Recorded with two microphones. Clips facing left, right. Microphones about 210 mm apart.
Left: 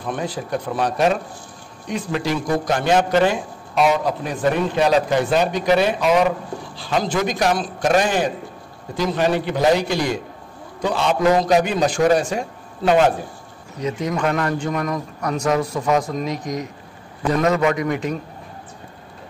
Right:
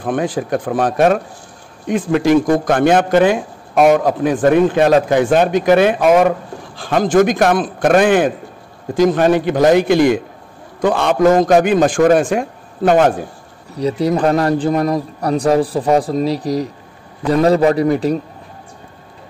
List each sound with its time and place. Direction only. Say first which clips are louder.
0.0 s a man's voice: right 7 dB; 50° right (ahead or behind)
13.7 s a man's voice: right 7 dB; 35° right (ahead or behind)